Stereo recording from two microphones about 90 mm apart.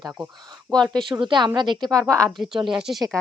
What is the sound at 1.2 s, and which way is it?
Speech, 60° right (ahead or behind).